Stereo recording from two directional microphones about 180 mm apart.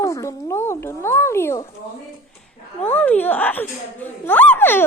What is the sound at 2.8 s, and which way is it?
A woman's voice, 10° left (ahead or behind).